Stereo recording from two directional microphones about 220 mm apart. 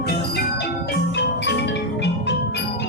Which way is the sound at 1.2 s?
55° left (ahead or behind).